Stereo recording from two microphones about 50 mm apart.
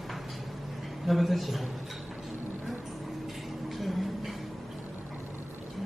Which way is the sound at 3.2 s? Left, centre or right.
Centre.